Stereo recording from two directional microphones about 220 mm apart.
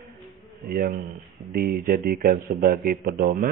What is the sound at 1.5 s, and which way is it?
Speech, 40° right (ahead or behind).